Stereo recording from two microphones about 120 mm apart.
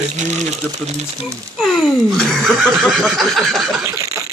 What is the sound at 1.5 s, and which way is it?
Snicker, centre (ahead or behind).